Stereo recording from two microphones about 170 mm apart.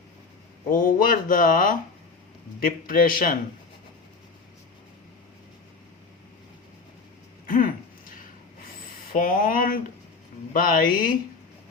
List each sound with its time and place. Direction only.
0.7 s a man's voice: 55° left (ahead or behind)
7.4 s a sound: 55° left (ahead or behind)
9.1 s a man's voice: 55° left (ahead or behind)